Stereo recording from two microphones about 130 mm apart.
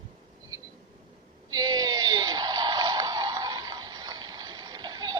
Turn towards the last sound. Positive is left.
turn(degrees=-30)  # may be behind; listen again after turning